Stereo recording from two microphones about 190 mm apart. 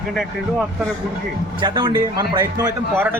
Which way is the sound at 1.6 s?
25° right (ahead or behind).